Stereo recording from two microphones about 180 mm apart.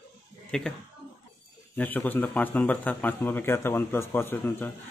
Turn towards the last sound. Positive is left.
turn(degrees=10)  # may be behind; listen again after turning